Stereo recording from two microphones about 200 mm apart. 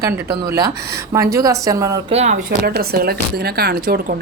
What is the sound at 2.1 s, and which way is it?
Speech, 35° right (ahead or behind).